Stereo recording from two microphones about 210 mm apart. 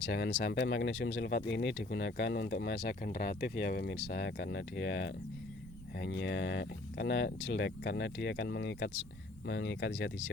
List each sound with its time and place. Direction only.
0.0 s speech: 55° left (ahead or behind)